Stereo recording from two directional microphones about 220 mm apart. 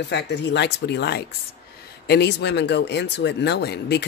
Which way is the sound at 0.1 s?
50° left (ahead or behind).